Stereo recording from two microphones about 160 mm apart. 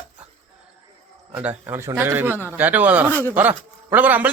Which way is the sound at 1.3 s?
10° right (ahead or behind).